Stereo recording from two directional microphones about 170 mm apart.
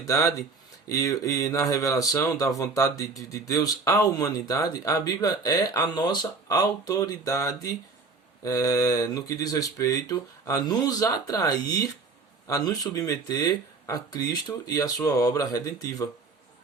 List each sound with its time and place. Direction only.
0.0 s speech: 20° left (ahead or behind)